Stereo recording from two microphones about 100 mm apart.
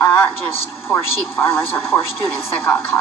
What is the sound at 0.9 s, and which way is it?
A man's voice, 25° left (ahead or behind).